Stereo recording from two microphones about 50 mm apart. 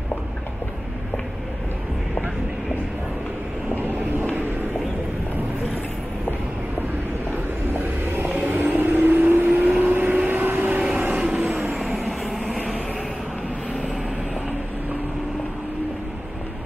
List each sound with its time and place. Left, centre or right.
3.7 s vehicle: right
7.8 s vehicle: right
9.8 s vehicle: right
10.7 s train: right
11.1 s vehicle: right
12.1 s vehicle: centre